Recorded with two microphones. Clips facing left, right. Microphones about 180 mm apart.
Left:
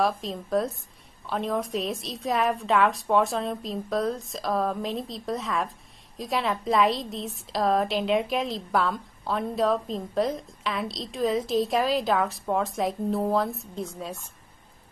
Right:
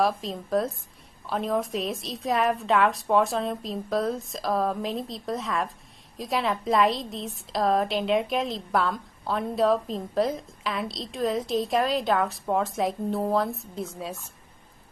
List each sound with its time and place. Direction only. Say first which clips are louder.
0.0 s a woman's voice: right 1 dB; centre (ahead or behind)